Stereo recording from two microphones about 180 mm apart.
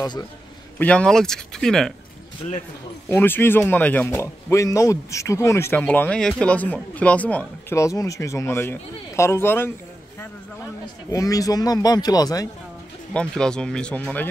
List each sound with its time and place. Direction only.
0.7 s speech: 5° left (ahead or behind)
3.1 s speech: 10° left (ahead or behind)
11.1 s speech: 20° left (ahead or behind)
13.1 s speech: 5° left (ahead or behind)